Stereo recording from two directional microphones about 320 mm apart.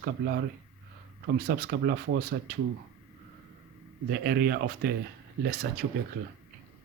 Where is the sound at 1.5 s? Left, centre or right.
Right.